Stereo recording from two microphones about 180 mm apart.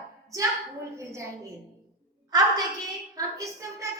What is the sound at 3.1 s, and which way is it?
Speech, 15° right (ahead or behind).